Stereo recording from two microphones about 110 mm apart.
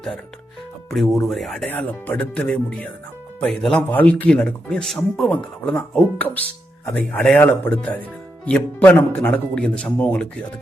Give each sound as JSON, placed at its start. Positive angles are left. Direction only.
{"t": 0.9, "sound": "speech", "side_deg": 0}
{"t": 1.7, "sound": "speech", "side_deg": 15}